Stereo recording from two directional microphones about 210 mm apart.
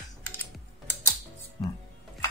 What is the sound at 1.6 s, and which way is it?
Speech, 20° left (ahead or behind).